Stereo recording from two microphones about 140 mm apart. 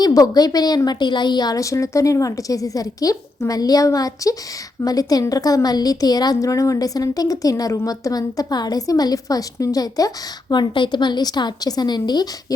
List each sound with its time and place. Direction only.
0.0 s a woman's voice: 25° left (ahead or behind)